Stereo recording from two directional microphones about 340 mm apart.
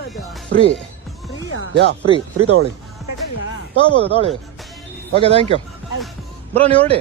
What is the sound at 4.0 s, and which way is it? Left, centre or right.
Speech, centre.